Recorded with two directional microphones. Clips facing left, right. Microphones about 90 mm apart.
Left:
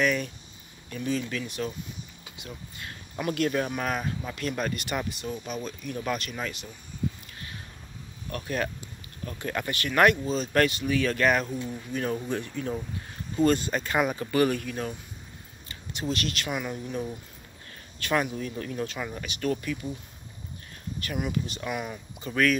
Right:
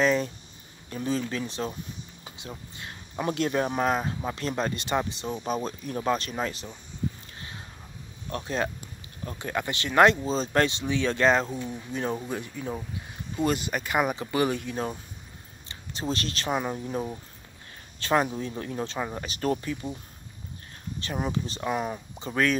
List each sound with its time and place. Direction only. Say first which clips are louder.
0.0 s a sound: right 3 dB; 25° right (ahead or behind)
0.8 s speech: right 1 dB; 30° right (ahead or behind)
8.3 s speech: right 1 dB; 25° right (ahead or behind)
11.5 s speech: even; 5° right (ahead or behind)
11.9 s speech: left 1 dB; 20° right (ahead or behind)
21.0 s speech: right 1 dB; 30° right (ahead or behind)